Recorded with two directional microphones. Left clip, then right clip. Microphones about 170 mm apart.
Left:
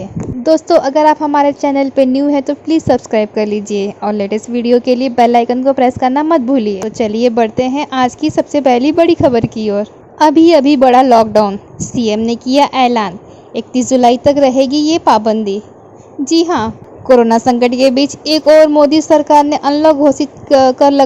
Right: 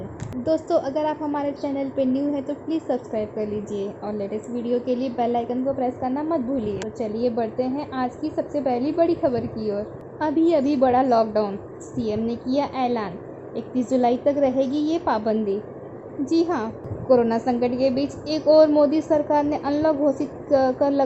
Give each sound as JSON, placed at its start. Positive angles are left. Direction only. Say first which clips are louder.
{"t": 0.4, "sound": "a woman's voice", "louder": "left 12 dB", "side_deg": 40}